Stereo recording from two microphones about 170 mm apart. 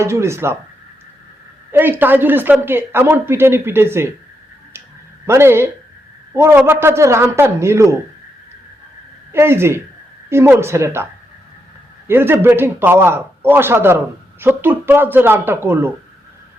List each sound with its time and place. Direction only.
0.0 s speech: 15° right (ahead or behind)
1.7 s speech: 10° right (ahead or behind)
5.2 s speech: 15° right (ahead or behind)
9.3 s speech: 15° right (ahead or behind)